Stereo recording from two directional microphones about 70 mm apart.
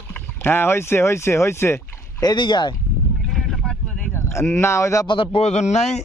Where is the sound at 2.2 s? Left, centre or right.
Left.